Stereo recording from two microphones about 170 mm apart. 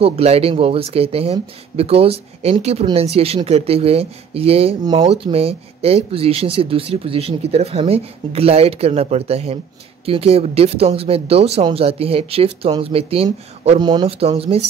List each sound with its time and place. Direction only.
0.0 s speech: 35° right (ahead or behind)